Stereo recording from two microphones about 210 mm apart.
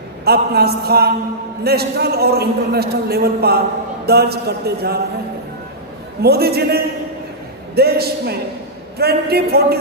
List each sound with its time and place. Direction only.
0.3 s a man's voice: 50° right (ahead or behind)
6.2 s a man's voice: 50° right (ahead or behind)